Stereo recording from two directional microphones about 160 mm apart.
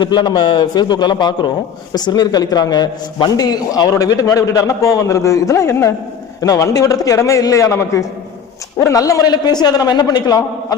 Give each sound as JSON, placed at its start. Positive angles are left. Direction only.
{"t": 0.0, "sound": "a man's voice", "side_deg": 30}